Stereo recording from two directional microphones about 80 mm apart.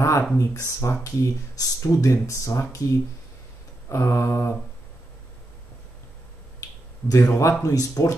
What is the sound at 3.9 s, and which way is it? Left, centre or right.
Speech, left.